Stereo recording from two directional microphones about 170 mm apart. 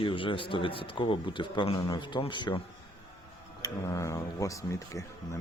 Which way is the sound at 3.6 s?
20° left (ahead or behind).